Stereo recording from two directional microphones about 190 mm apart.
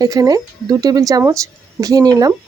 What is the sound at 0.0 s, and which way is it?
Speech, 20° right (ahead or behind).